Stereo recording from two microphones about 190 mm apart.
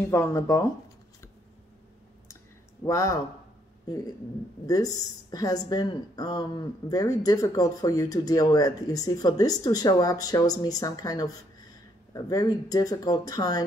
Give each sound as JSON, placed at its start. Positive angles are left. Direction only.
{"t": 0.0, "sound": "speech", "side_deg": 15}
{"t": 2.8, "sound": "a woman's voice", "side_deg": 15}